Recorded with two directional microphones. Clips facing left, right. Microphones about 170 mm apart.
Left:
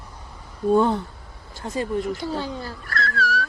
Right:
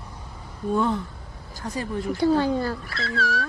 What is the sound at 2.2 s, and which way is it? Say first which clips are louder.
Speech: right 8 dB; 50° right (ahead or behind).